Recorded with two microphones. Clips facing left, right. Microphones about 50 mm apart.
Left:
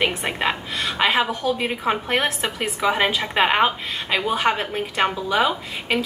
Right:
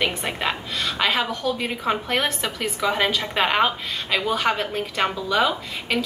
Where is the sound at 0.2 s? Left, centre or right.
Centre.